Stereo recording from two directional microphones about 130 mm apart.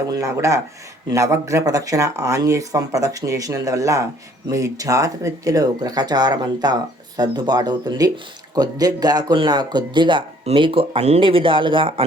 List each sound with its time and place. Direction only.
0.1 s speech: 25° right (ahead or behind); by 12.0 s 40° right (ahead or behind)